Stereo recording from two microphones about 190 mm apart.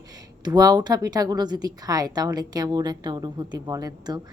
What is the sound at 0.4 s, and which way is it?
A woman's voice, 20° right (ahead or behind).